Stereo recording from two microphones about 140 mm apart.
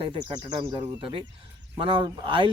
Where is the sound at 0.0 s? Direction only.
40° right (ahead or behind).